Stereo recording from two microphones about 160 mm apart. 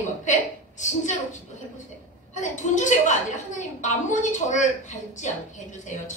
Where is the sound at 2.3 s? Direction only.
50° left (ahead or behind).